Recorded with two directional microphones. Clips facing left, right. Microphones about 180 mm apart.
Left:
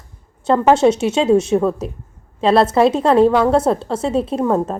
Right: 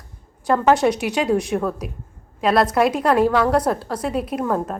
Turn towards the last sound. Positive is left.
turn(degrees=25)  # may be behind; listen again after turning